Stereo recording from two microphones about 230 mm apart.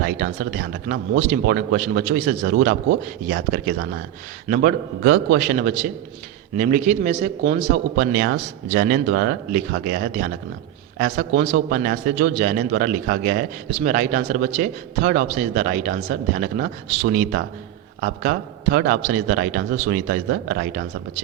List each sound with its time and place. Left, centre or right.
0.0 s a man's voice: right
2.4 s a man's voice: right
13.7 s a man's voice: right